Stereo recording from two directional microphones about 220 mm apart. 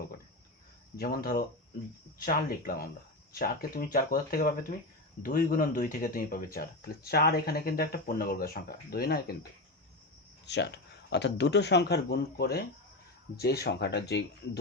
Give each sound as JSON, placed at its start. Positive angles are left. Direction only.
{"t": 0.9, "sound": "speech", "side_deg": 40}
{"t": 10.4, "sound": "speech", "side_deg": 50}